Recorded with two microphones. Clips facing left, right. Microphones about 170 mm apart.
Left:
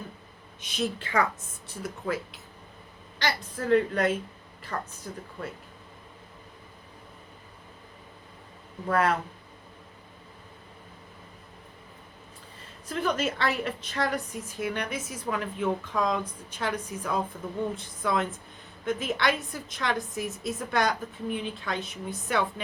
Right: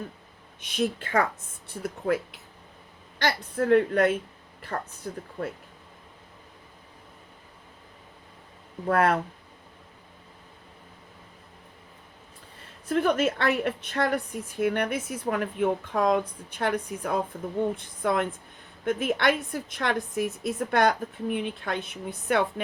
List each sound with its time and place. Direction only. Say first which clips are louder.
0.6 s a woman's voice: right 3 dB; 55° right (ahead or behind)
8.9 s a woman's voice: right 3 dB; 55° right (ahead or behind)
12.9 s a woman's voice: right 5 dB; 55° right (ahead or behind)